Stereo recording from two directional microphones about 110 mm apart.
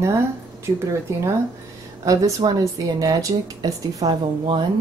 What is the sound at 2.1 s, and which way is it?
Speech, 30° right (ahead or behind).